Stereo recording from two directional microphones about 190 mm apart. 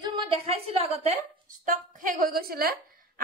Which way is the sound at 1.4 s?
45° right (ahead or behind).